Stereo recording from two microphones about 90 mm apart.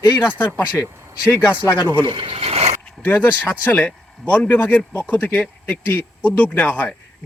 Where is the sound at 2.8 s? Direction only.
15° left (ahead or behind).